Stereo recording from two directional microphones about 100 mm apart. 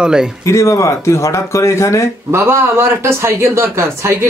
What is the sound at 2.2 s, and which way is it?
A man's voice, 25° right (ahead or behind).